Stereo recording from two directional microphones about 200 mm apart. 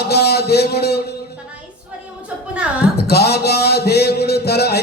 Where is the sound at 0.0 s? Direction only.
55° left (ahead or behind).